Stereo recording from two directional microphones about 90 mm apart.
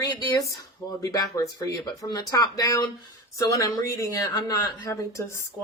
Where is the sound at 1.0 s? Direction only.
40° left (ahead or behind).